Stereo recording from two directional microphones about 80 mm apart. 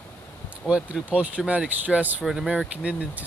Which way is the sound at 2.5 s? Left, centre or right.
Centre.